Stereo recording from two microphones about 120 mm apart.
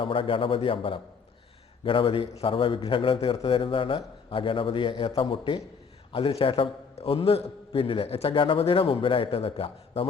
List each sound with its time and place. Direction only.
0.0 s a man's voice: 45° left (ahead or behind)